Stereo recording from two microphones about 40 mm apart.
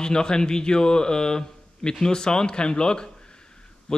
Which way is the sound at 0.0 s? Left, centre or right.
Centre.